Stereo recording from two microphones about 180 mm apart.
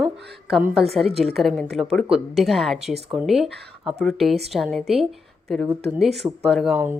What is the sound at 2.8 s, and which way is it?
Speech, 35° right (ahead or behind).